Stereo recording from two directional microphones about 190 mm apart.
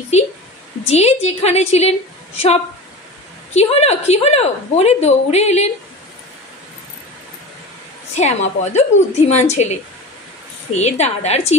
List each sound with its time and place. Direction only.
0.1 s a woman's voice: 35° left (ahead or behind)
8.2 s a woman's voice: 35° left (ahead or behind)